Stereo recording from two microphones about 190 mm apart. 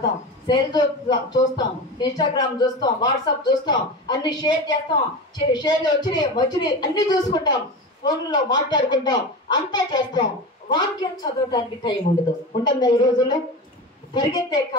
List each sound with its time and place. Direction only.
0.5 s a woman's voice: 20° left (ahead or behind)